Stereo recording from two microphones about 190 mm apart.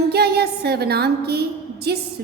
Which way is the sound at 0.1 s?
55° right (ahead or behind).